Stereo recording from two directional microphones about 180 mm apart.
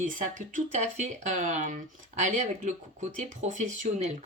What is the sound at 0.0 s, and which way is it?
Speech, 45° right (ahead or behind).